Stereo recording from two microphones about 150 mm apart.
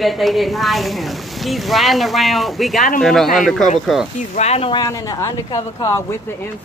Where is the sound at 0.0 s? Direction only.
Centre (ahead or behind).